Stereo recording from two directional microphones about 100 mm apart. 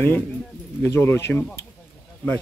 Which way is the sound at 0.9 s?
25° left (ahead or behind).